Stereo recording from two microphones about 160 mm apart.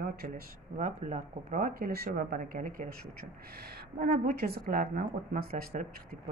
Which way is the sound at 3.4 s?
75° right (ahead or behind).